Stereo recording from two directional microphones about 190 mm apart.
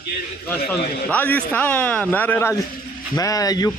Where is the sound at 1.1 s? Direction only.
10° left (ahead or behind).